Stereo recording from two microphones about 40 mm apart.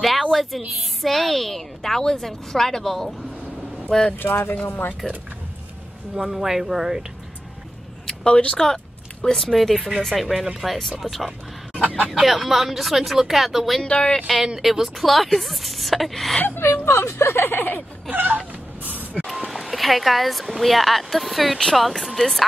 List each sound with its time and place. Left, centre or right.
0.0 s a sound: centre
1.0 s a woman's voice: centre
4.2 s speech: left
5.0 s speech: centre
6.2 s speech: centre
8.1 s a sound: left
8.5 s speech: centre
10.2 s speech: centre
13.8 s speech: left
14.4 s speech: centre
16.4 s speech: left
18.1 s laughter: right
18.8 s vehicle: right
19.2 s speech: centre